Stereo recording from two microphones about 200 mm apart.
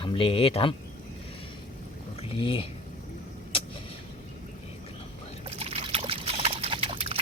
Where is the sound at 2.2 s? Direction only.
25° left (ahead or behind).